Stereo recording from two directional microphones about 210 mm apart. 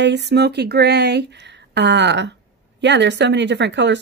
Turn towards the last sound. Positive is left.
turn(degrees=-55)  # may be behind; listen again after turning